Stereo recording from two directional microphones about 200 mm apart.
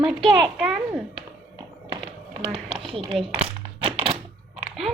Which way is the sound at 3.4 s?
30° right (ahead or behind).